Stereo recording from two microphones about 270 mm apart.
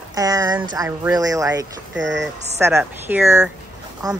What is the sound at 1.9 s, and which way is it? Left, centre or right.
Speech, right.